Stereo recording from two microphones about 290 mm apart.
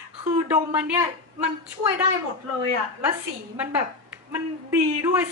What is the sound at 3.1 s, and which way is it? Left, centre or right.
A man's voice, centre.